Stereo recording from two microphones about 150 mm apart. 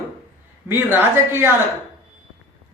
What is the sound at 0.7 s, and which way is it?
Speech, 15° right (ahead or behind).